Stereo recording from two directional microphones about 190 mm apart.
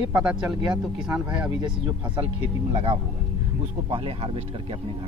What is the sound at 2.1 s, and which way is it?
Speech, 30° right (ahead or behind).